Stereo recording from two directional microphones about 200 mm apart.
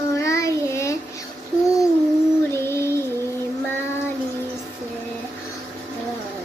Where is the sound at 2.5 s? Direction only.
10° left (ahead or behind).